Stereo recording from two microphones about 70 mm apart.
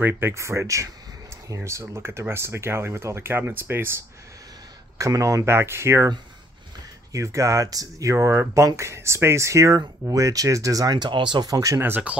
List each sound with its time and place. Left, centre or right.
0.0 s speech: right
4.9 s speech: right
7.1 s speech: right
12.1 s speech: centre